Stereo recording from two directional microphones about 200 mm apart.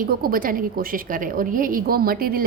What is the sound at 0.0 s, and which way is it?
A woman's voice, 45° right (ahead or behind).